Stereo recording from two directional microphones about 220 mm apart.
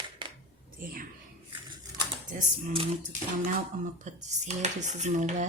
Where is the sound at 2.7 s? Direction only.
35° right (ahead or behind).